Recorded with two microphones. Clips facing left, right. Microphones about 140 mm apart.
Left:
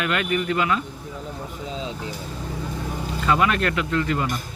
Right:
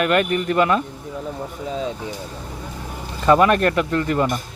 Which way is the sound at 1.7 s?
50° right (ahead or behind).